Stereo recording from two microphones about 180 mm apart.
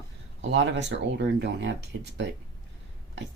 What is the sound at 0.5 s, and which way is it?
Speech, 75° right (ahead or behind).